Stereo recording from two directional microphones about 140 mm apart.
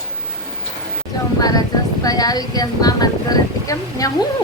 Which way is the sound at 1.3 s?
25° left (ahead or behind).